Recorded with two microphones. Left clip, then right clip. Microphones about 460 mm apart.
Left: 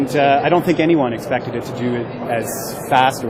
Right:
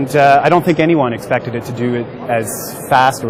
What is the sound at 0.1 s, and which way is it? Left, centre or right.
Speech, right.